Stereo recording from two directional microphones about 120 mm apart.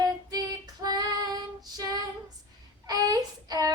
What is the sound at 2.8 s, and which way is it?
Child singing, 30° right (ahead or behind).